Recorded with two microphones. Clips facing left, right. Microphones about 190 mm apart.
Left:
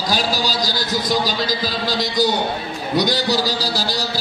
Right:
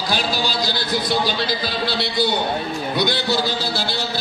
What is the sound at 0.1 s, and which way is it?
A man's voice, 40° left (ahead or behind).